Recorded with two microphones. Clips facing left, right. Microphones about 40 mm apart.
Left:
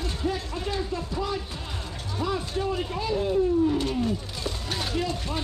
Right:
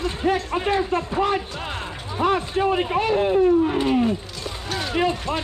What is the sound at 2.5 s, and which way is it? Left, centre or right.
Speech, right.